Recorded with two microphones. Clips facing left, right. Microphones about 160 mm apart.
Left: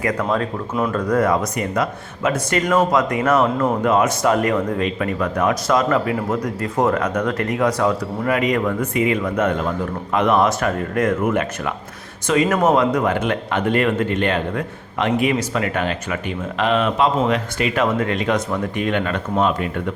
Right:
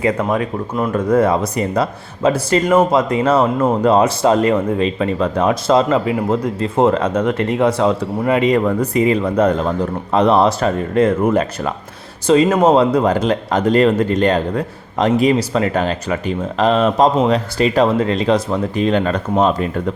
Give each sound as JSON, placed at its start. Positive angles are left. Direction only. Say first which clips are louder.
{"t": 0.0, "sound": "speech", "louder": "right 3 dB", "side_deg": -25}